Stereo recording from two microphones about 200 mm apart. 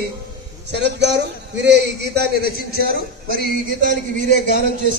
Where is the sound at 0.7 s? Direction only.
60° right (ahead or behind).